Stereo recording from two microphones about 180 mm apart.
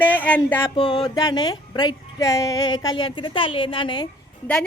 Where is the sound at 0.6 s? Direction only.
30° left (ahead or behind).